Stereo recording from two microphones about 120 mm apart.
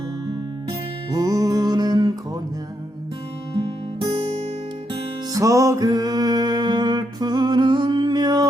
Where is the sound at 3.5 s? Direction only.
45° right (ahead or behind).